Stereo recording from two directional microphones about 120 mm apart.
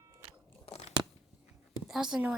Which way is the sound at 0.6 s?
60° left (ahead or behind).